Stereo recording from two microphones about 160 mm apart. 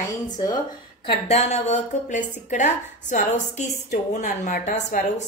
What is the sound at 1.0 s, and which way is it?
A woman's voice, 40° left (ahead or behind).